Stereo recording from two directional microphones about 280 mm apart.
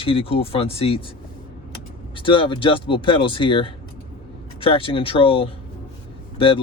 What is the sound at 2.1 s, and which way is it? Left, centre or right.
Speech, centre.